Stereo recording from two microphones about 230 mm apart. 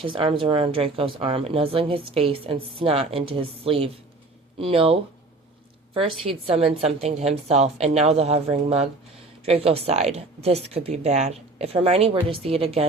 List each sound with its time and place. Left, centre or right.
0.0 s speech: right